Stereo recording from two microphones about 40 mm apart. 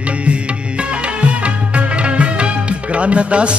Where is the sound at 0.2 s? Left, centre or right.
Right.